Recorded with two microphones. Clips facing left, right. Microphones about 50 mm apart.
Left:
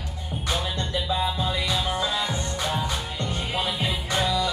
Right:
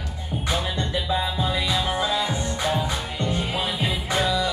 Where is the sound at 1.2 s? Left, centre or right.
Centre.